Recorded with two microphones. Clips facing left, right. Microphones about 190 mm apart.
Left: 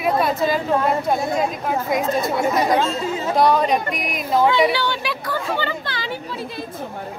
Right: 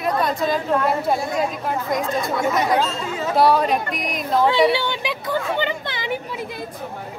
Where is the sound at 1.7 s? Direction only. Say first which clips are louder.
Left 2 dB; 5° left (ahead or behind).